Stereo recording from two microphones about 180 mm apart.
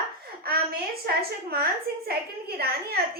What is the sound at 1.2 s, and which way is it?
A woman's voice, 60° right (ahead or behind).